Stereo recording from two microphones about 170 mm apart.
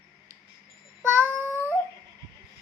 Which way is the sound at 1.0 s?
10° right (ahead or behind).